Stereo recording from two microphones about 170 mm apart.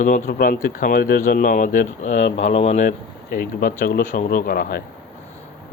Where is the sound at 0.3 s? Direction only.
65° left (ahead or behind); by 2.9 s 45° left (ahead or behind).